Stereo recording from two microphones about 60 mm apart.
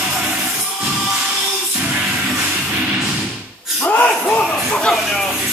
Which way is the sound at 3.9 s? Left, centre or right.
Left.